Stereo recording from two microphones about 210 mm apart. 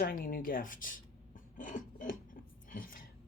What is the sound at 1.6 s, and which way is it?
Filing, 40° left (ahead or behind).